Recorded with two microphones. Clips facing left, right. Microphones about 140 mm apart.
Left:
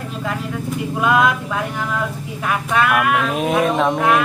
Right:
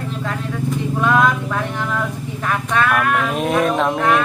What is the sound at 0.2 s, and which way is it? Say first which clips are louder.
Speech: left 1 dB; 5° left (ahead or behind).